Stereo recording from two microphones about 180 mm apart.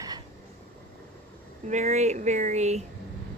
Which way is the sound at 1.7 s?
40° right (ahead or behind).